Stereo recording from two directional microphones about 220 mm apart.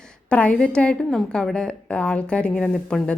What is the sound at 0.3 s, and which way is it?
A woman's voice, 5° left (ahead or behind).